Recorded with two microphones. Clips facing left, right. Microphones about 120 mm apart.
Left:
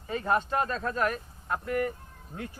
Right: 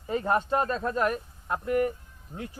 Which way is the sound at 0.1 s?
25° right (ahead or behind).